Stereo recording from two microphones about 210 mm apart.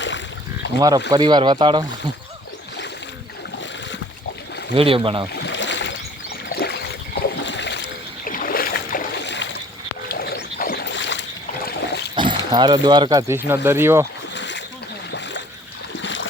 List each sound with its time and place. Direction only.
0.8 s speech: 15° right (ahead or behind)
4.7 s speech: 25° right (ahead or behind)
5.4 s a sound: 60° left (ahead or behind)
6.5 s rowboat: 50° left (ahead or behind)
7.4 s boat: 55° left (ahead or behind)
12.1 s speech: 20° right (ahead or behind)
14.3 s splash: 60° left (ahead or behind)
16.0 s stream: 60° left (ahead or behind)